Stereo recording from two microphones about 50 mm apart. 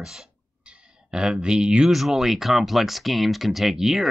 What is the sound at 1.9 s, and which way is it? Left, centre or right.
Speech, centre.